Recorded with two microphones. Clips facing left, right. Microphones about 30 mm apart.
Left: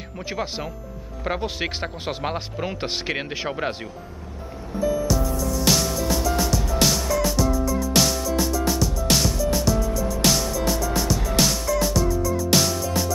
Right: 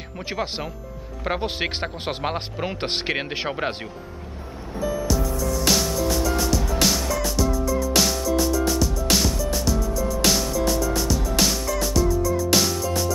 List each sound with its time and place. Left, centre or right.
0.3 s speech: centre
4.7 s music: centre